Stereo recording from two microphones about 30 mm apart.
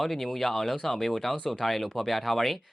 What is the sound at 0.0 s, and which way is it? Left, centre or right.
Speech, centre.